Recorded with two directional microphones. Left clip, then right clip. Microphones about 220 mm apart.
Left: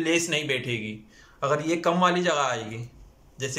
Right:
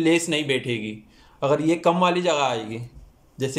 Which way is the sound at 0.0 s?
20° right (ahead or behind).